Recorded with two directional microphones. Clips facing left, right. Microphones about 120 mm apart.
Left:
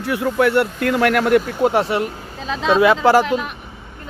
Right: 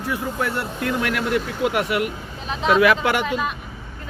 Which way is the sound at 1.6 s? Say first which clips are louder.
Left 4 dB; 30° left (ahead or behind).